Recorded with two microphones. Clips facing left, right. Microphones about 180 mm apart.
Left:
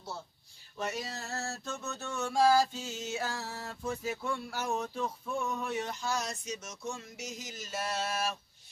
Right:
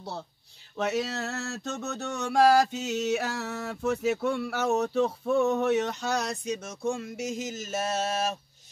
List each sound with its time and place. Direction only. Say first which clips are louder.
0.7 s mantra: right 8 dB; 70° right (ahead or behind); by 8.4 s 40° right (ahead or behind)